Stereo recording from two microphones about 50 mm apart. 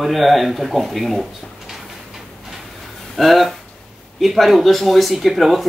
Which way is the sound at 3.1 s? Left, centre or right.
Centre.